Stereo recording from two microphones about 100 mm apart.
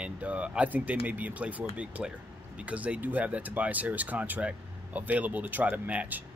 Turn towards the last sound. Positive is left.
turn(degrees=-15)  # may be behind; listen again after turning